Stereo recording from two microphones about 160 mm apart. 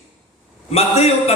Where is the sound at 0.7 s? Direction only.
40° left (ahead or behind).